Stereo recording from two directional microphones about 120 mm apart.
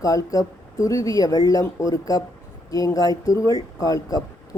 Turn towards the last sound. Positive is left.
turn(degrees=30)  # may be behind; listen again after turning